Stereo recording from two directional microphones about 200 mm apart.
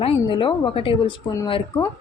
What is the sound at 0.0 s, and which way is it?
Speech, 25° left (ahead or behind).